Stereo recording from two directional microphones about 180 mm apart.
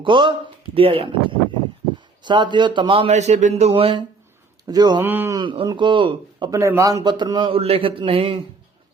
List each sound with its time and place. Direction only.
0.0 s speech: 25° right (ahead or behind)
2.2 s a man's voice: 25° right (ahead or behind)
5.0 s speech: 10° right (ahead or behind)
5.4 s speech: 25° right (ahead or behind)